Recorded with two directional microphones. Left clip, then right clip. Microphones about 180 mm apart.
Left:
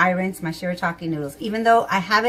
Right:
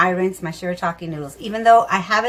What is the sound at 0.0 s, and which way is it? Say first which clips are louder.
Speech: right 2 dB; 5° right (ahead or behind).